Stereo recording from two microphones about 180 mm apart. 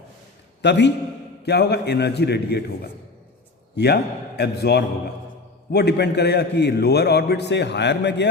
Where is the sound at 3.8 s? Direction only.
65° left (ahead or behind).